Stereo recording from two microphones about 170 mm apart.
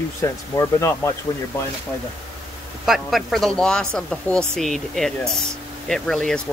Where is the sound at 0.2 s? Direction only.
15° left (ahead or behind).